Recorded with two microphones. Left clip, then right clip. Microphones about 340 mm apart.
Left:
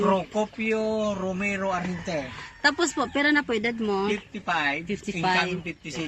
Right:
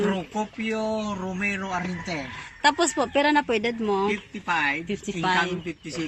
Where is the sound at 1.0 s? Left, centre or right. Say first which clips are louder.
Left 1 dB; centre.